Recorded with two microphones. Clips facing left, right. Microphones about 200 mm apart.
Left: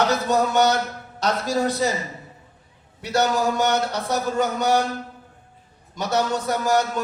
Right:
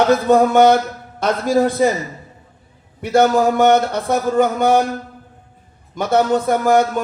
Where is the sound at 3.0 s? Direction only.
55° right (ahead or behind).